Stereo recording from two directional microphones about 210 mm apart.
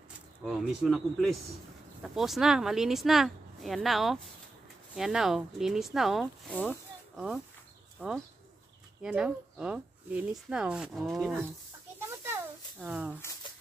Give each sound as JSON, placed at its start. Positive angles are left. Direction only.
{"t": 0.4, "sound": "speech", "side_deg": 0}
{"t": 7.2, "sound": "speech", "side_deg": -5}
{"t": 12.8, "sound": "speech", "side_deg": -5}